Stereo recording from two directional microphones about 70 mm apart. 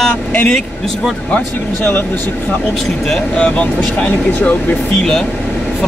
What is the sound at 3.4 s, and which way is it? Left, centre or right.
Speech, centre.